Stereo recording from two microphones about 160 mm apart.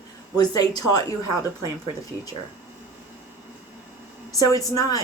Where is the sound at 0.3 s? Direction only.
25° left (ahead or behind).